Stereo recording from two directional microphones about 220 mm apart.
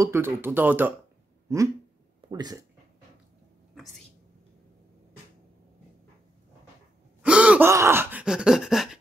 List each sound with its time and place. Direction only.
0.0 s speech: 10° right (ahead or behind)
2.2 s speech: 20° right (ahead or behind)
7.2 s gasp: 5° right (ahead or behind)